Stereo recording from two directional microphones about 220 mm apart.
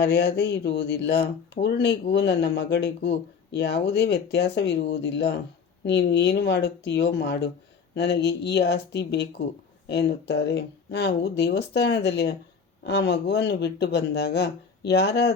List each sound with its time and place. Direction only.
0.0 s speech: 50° left (ahead or behind)